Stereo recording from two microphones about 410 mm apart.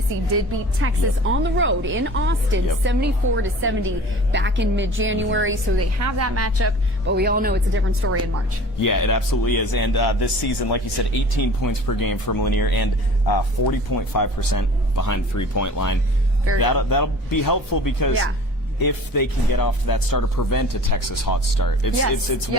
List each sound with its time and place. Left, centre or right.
1.3 s a woman's voice: right
6.0 s a woman's voice: right
8.8 s speech: left